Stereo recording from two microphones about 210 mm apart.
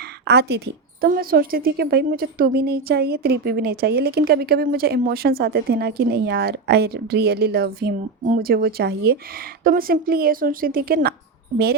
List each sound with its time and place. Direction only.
0.3 s a woman's voice: 50° right (ahead or behind)